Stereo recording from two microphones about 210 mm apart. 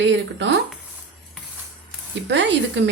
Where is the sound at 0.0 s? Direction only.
60° right (ahead or behind).